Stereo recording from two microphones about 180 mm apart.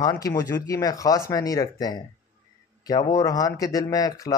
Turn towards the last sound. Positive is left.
turn(degrees=20)  # may be behind; listen again after turning